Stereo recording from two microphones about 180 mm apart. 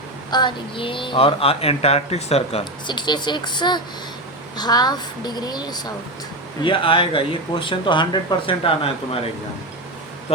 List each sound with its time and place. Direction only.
0.3 s a woman's voice: 25° left (ahead or behind)